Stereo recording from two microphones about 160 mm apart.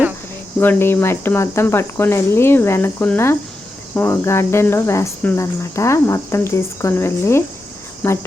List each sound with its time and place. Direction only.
0.6 s speech: 15° left (ahead or behind)